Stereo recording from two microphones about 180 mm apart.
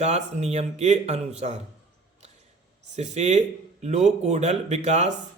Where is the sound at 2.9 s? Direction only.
40° right (ahead or behind).